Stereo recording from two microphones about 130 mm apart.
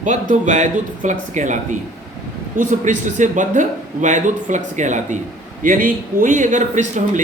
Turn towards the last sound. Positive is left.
turn(degrees=-75)  # may be behind; listen again after turning